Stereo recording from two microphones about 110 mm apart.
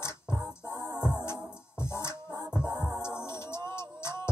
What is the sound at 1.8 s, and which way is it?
Music, 25° left (ahead or behind).